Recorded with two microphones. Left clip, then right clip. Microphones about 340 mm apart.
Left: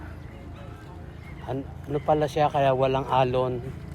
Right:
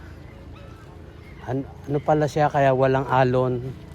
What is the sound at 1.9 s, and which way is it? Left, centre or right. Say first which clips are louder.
Speech: right 2 dB; right.